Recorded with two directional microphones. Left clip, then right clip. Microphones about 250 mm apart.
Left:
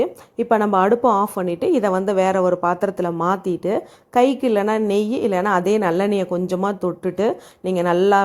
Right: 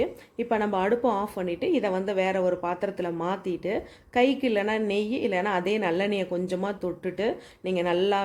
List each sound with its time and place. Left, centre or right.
0.0 s a woman's voice: left